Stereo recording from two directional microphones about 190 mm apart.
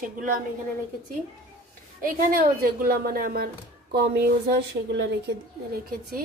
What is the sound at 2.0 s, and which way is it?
A woman's voice, 50° right (ahead or behind).